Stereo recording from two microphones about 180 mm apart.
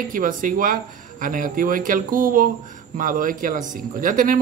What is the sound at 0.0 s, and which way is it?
Speech, 50° right (ahead or behind).